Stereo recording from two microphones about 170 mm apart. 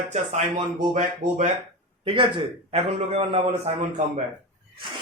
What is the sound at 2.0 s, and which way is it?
Speech, 30° right (ahead or behind).